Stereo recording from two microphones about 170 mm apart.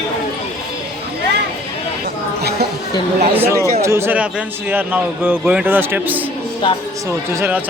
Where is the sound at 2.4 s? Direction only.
70° right (ahead or behind).